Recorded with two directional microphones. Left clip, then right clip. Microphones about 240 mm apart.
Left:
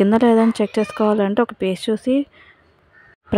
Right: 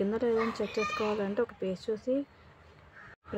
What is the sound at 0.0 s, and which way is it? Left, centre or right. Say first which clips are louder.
A woman's voice: left 14 dB; left.